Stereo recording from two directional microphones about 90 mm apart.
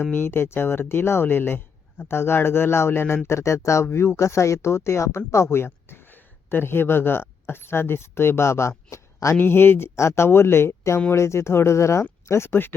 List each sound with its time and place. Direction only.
0.0 s speech: 25° left (ahead or behind)